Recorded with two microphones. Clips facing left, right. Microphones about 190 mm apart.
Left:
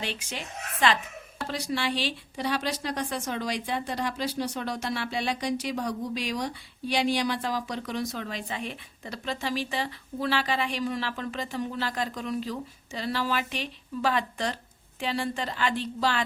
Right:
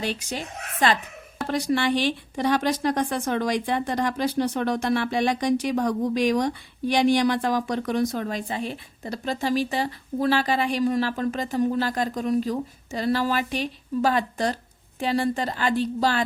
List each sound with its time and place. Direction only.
0.0 s a woman's voice: 40° right (ahead or behind)
1.5 s speech: 50° right (ahead or behind)